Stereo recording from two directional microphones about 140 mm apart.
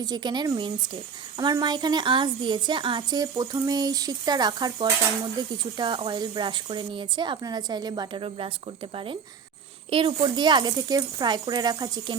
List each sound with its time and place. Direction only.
0.0 s a woman's voice: 30° right (ahead or behind)
9.9 s a woman's voice: 35° right (ahead or behind)